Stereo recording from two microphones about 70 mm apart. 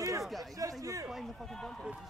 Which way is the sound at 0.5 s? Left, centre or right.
Right.